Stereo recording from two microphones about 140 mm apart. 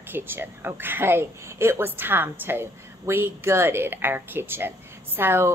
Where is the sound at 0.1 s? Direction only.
15° right (ahead or behind).